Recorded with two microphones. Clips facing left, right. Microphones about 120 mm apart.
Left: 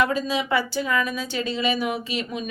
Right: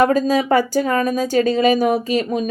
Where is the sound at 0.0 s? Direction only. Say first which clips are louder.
Right 8 dB; 45° right (ahead or behind).